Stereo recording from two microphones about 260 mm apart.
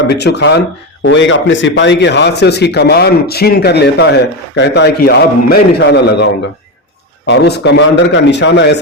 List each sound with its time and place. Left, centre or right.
0.1 s a man's voice: left
7.3 s a man's voice: left